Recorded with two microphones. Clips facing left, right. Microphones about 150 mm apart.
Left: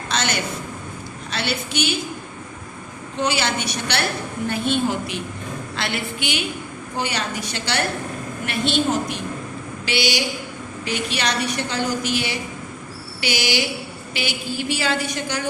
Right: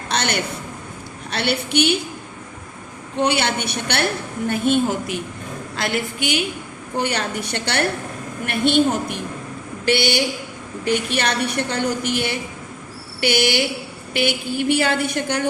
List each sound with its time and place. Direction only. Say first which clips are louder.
0.1 s a sound: right 2 dB; 60° right (ahead or behind)
1.3 s a woman's voice: right 4 dB; 60° right (ahead or behind)
3.2 s a woman's voice: right 3 dB; 60° right (ahead or behind)
6.9 s a woman's voice: right 3 dB; 60° right (ahead or behind)